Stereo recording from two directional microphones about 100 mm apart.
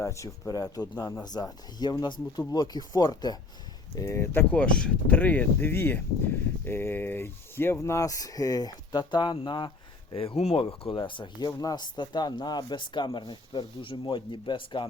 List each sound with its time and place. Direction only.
0.0 s speech: 30° left (ahead or behind)
3.9 s speech: 30° left (ahead or behind)
4.5 s speech: 10° left (ahead or behind); by 14.8 s 50° left (ahead or behind)